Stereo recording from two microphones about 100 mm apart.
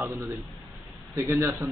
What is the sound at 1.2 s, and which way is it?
Speech, 30° right (ahead or behind).